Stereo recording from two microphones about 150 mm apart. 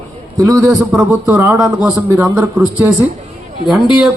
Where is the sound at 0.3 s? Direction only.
25° right (ahead or behind).